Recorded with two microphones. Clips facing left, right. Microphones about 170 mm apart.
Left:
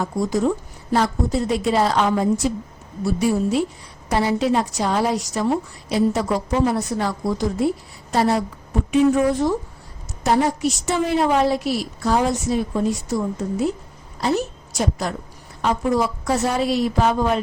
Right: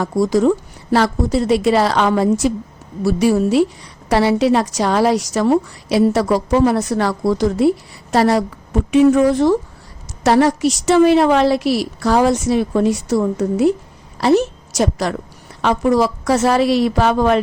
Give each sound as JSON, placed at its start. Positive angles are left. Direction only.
{"t": 0.0, "sound": "a woman's voice", "side_deg": -90}